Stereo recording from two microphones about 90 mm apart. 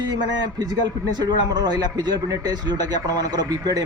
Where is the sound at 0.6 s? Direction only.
50° right (ahead or behind).